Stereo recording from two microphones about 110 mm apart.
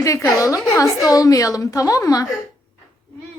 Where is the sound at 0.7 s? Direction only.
30° left (ahead or behind).